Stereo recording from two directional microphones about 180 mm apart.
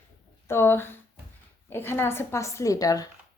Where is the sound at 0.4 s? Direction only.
15° left (ahead or behind).